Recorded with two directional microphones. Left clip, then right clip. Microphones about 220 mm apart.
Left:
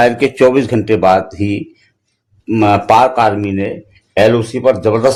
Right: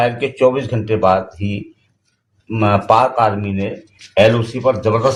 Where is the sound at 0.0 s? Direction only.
45° left (ahead or behind).